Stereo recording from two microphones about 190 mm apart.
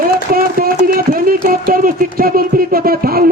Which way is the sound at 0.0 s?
50° right (ahead or behind).